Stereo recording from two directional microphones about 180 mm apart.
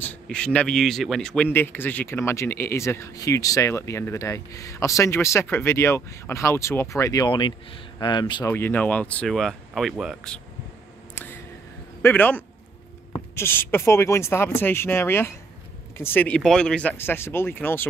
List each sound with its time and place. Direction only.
0.0 s speech: 5° left (ahead or behind); by 8.5 s 25° left (ahead or behind)
8.5 s speech: 10° left (ahead or behind)
12.0 s speech: 10° left (ahead or behind)